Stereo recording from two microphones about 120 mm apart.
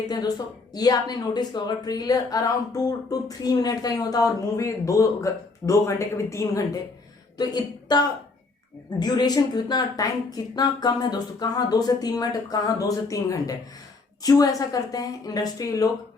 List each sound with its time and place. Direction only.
0.1 s a woman's voice: 35° left (ahead or behind)